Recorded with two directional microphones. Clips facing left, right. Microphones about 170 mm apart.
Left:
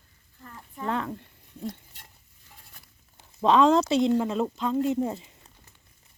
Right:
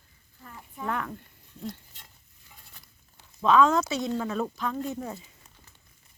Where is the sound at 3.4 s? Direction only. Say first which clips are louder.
Left 2 dB; 30° left (ahead or behind).